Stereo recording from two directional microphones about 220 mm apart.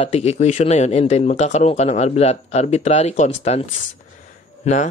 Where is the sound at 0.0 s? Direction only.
30° left (ahead or behind).